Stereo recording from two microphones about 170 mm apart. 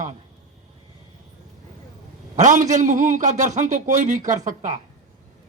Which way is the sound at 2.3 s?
50° right (ahead or behind).